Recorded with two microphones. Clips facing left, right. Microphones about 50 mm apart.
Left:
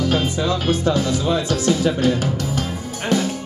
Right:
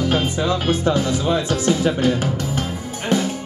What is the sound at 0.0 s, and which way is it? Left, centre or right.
Music, right.